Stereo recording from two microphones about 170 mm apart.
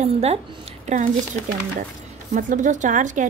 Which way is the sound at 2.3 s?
50° right (ahead or behind).